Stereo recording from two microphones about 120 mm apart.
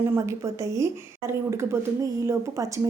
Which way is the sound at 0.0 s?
20° right (ahead or behind).